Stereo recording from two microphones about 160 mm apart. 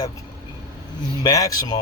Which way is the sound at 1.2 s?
25° left (ahead or behind).